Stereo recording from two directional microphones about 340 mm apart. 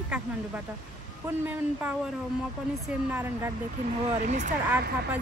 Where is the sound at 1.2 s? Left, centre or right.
Centre.